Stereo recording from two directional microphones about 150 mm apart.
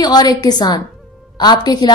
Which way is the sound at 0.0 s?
25° left (ahead or behind).